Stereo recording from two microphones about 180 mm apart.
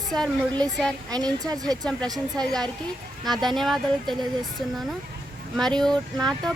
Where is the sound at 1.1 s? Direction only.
20° right (ahead or behind).